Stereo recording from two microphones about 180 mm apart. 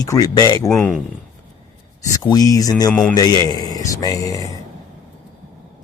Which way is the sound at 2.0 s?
20° left (ahead or behind).